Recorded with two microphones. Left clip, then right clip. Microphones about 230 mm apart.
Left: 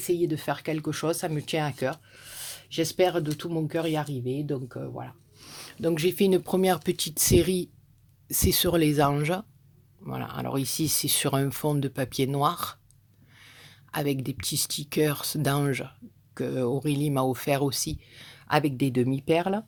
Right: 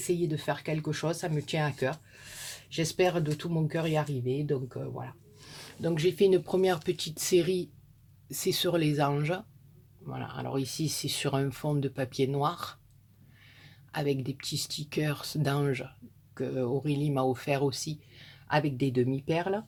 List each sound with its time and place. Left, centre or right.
0.0 s speech: left